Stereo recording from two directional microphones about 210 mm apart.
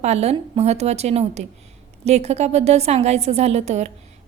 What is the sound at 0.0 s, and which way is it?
A woman's voice, 30° right (ahead or behind).